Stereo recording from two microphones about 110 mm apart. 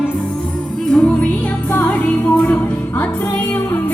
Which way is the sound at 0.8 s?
10° left (ahead or behind).